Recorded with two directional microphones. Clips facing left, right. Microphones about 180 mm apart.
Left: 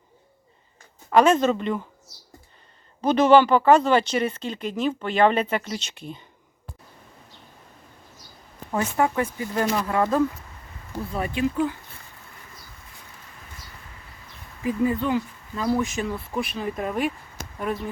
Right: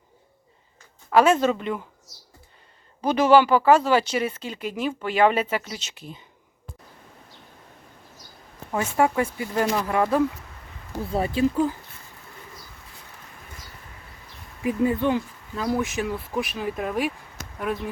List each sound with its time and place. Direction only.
1.1 s speech: 5° right (ahead or behind)
3.0 s speech: 10° right (ahead or behind)
9.0 s speech: 15° right (ahead or behind)
11.1 s speech: 35° right (ahead or behind)
14.6 s speech: 20° right (ahead or behind); by 17.1 s centre (ahead or behind)